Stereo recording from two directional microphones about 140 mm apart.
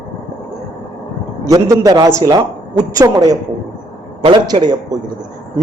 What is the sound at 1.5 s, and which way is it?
A man's voice, 25° right (ahead or behind).